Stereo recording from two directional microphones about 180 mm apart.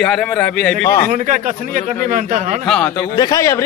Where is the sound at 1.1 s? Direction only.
45° right (ahead or behind).